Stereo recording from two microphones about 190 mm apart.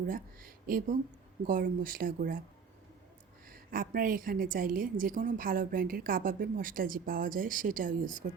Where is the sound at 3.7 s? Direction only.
50° right (ahead or behind).